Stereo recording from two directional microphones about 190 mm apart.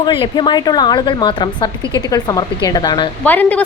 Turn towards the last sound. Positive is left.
turn(degrees=10)  # may be behind; listen again after turning